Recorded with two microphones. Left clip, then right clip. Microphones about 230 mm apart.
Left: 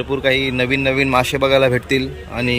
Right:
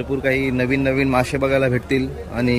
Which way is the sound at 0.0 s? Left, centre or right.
Centre.